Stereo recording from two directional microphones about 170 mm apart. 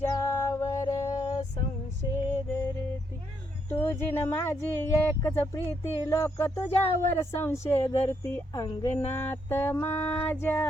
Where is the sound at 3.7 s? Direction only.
15° left (ahead or behind).